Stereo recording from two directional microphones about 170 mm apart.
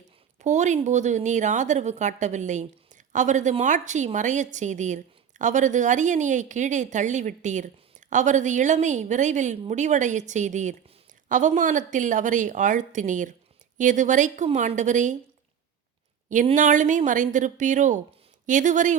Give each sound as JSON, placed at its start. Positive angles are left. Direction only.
{"t": 0.4, "sound": "a woman's voice", "side_deg": -45}
{"t": 16.6, "sound": "a woman's voice", "side_deg": -50}